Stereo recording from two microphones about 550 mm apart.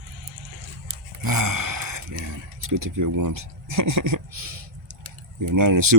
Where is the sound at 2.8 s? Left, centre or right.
Right.